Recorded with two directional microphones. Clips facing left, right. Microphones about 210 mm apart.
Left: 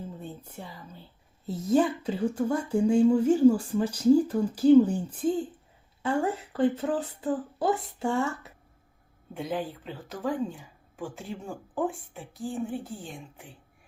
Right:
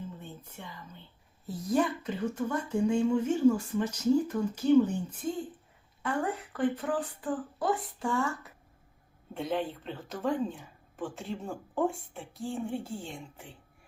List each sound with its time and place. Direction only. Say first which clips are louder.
0.2 s a sound: left 5 dB; 35° left (ahead or behind)
1.5 s speech: left 4 dB; 25° left (ahead or behind)
9.3 s speech: even; centre (ahead or behind)